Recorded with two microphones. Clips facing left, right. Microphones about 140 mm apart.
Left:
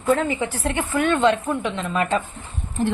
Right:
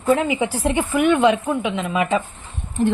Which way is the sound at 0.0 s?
10° right (ahead or behind).